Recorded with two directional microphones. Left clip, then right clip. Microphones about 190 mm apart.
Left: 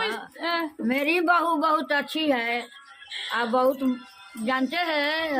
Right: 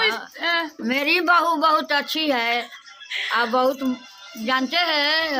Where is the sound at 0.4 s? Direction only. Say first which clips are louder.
Right 5 dB; 15° right (ahead or behind).